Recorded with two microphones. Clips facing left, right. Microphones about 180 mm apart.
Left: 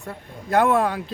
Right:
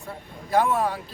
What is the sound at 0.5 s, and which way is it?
Speech, 80° left.